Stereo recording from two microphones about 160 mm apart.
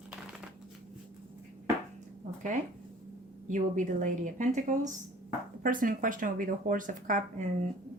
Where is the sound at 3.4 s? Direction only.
55° right (ahead or behind).